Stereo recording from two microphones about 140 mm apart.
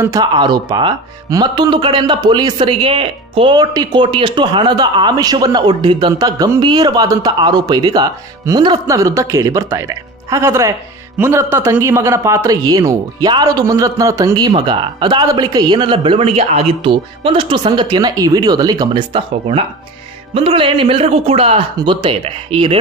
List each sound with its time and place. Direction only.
0.0 s speech: 25° right (ahead or behind)
3.5 s speech: 30° right (ahead or behind)